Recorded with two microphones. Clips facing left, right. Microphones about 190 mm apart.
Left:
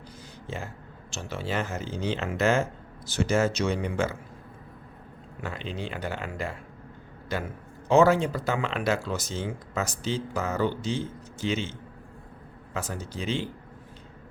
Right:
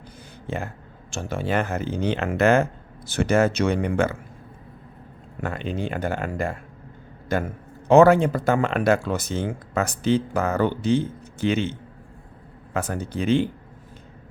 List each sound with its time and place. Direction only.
0.4 s speech: 60° right (ahead or behind)
5.4 s speech: 55° right (ahead or behind)
12.7 s speech: 60° right (ahead or behind)